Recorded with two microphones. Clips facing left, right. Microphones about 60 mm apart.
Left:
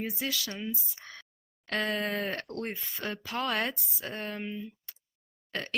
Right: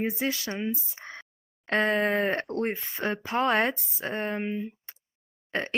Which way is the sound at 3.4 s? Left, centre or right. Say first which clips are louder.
Right 7 dB; right.